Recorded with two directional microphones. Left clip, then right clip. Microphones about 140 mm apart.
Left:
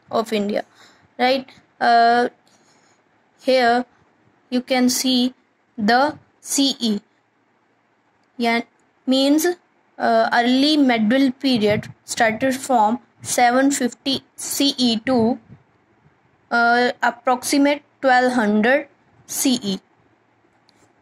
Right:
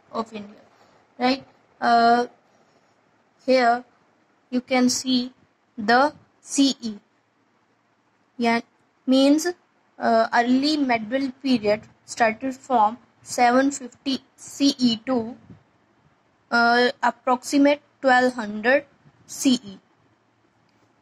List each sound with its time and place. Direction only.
1.8 s speech: 35° left (ahead or behind)
3.3 s a woman's voice: 35° left (ahead or behind)
8.4 s speech: 25° left (ahead or behind)
16.4 s a woman's voice: 25° left (ahead or behind)